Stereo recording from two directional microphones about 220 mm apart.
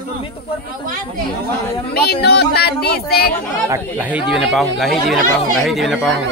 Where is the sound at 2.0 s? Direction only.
50° left (ahead or behind).